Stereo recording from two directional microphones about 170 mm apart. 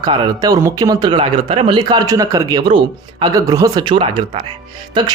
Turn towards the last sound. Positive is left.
turn(degrees=-25)  # may be behind; listen again after turning